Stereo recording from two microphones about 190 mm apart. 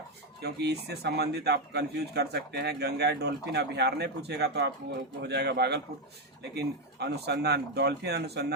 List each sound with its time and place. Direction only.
0.4 s speech: 60° right (ahead or behind)